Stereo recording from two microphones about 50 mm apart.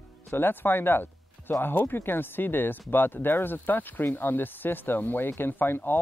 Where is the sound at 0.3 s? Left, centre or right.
Left.